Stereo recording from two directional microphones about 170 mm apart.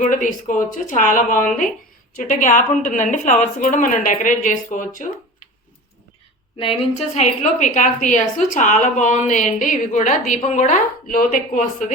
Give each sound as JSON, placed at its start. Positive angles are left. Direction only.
{"t": 0.0, "sound": "a woman's voice", "side_deg": 50}
{"t": 6.6, "sound": "a woman's voice", "side_deg": 40}